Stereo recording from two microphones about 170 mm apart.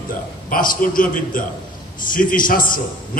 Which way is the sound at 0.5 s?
55° left (ahead or behind).